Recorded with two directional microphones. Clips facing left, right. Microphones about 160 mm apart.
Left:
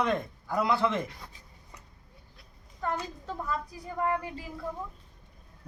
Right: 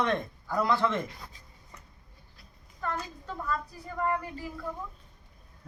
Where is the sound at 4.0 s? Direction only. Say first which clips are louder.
Even; 20° left (ahead or behind).